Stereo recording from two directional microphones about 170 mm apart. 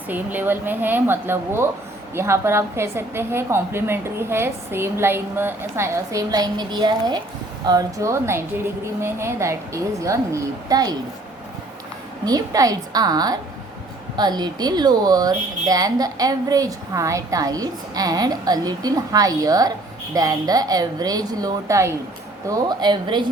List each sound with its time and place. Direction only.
0.1 s a woman's voice: 10° right (ahead or behind)
12.2 s speech: 20° right (ahead or behind)